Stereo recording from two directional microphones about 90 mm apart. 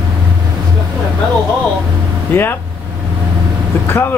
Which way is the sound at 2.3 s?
25° left (ahead or behind).